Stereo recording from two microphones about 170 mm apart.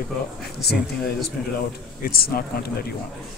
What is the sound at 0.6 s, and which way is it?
Speech, 70° left (ahead or behind).